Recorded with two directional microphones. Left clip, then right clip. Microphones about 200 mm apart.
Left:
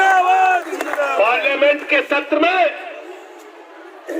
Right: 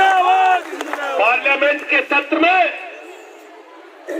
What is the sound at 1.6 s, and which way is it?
Speech, 20° left (ahead or behind).